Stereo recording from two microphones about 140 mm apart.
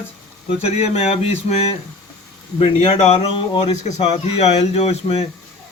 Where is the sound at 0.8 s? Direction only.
50° left (ahead or behind).